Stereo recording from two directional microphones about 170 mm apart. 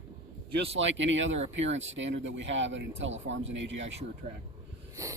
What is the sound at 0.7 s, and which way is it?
Speech, 90° right.